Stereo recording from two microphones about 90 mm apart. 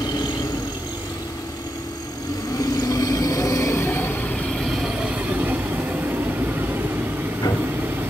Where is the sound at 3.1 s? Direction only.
40° left (ahead or behind); by 4.1 s 25° left (ahead or behind).